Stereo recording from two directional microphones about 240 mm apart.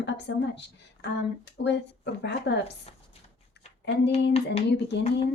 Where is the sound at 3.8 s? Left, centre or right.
Left.